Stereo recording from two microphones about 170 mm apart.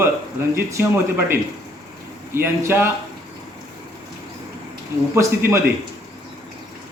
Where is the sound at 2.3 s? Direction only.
15° right (ahead or behind).